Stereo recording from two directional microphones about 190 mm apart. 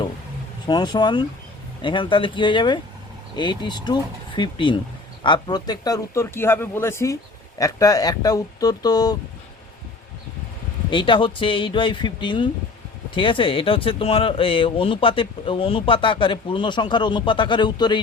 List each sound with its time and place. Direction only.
0.7 s speech: 20° left (ahead or behind)
10.8 s speech: 25° left (ahead or behind)